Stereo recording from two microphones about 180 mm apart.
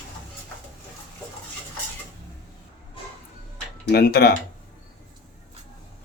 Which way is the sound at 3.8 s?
60° left (ahead or behind).